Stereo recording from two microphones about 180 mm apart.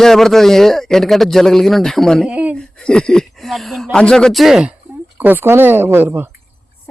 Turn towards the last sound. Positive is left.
turn(degrees=-10)  # may be behind; listen again after turning